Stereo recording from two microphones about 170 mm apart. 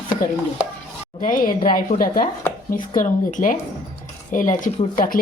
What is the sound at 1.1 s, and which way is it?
Speech, 55° left (ahead or behind).